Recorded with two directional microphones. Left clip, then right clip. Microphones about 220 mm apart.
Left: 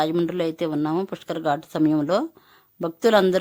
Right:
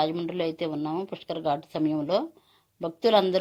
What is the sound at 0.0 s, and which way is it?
A woman's voice, 20° left (ahead or behind).